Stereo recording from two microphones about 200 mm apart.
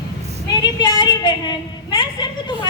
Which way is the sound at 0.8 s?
25° left (ahead or behind).